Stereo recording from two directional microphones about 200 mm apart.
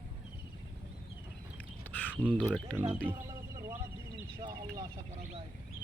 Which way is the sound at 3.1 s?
15° right (ahead or behind).